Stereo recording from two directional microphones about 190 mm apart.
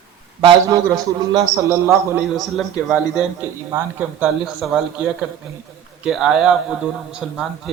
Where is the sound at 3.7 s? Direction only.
15° right (ahead or behind).